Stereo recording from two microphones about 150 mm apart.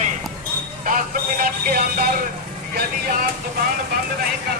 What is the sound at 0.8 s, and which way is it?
Music, 65° right (ahead or behind).